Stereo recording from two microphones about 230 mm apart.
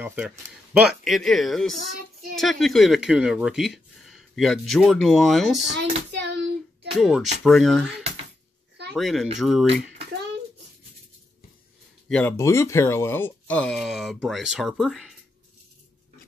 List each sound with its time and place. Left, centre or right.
0.0 s speech: centre
5.6 s a child's voice: right
6.3 s child singing: right
7.0 s speech: centre
8.9 s speech: centre
12.1 s speech: centre